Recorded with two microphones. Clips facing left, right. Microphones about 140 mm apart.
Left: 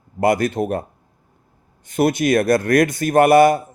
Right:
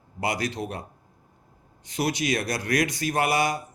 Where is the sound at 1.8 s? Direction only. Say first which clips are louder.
Left 9 dB; 50° left (ahead or behind).